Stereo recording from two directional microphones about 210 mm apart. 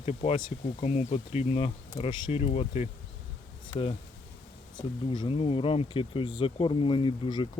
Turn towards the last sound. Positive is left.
turn(degrees=25)  # may be behind; listen again after turning